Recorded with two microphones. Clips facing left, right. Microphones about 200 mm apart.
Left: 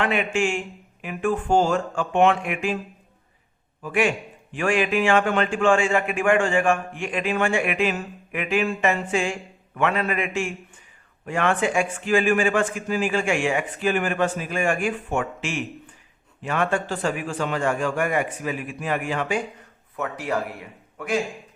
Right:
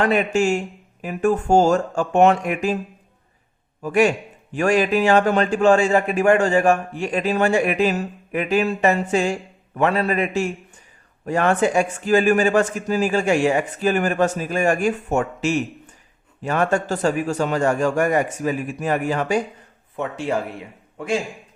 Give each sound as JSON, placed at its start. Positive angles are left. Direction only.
{"t": 0.0, "sound": "a man's voice", "side_deg": -40}
{"t": 3.8, "sound": "a man's voice", "side_deg": -40}
{"t": 20.0, "sound": "speech", "side_deg": -25}